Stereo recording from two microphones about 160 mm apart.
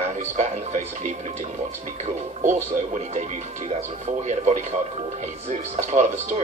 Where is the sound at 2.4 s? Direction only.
50° right (ahead or behind).